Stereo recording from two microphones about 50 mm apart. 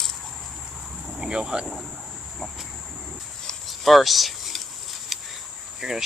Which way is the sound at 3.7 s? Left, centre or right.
Centre.